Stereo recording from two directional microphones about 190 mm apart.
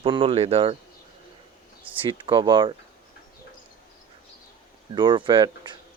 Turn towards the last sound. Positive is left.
turn(degrees=-25)  # may be behind; listen again after turning